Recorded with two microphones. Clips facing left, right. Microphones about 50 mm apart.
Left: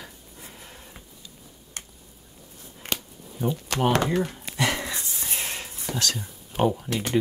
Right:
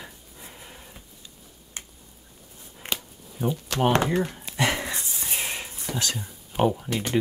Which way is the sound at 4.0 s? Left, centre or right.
Centre.